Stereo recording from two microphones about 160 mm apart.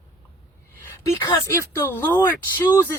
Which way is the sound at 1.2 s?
25° left (ahead or behind).